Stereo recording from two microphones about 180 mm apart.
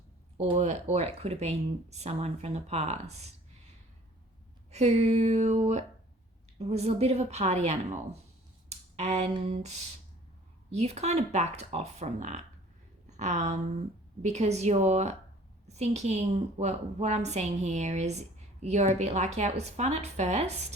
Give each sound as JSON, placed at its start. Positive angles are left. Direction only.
{"t": 0.3, "sound": "a woman's voice", "side_deg": -35}
{"t": 4.7, "sound": "a woman's voice", "side_deg": -35}
{"t": 8.7, "sound": "a sound", "side_deg": -40}
{"t": 9.3, "sound": "a woman's voice", "side_deg": -35}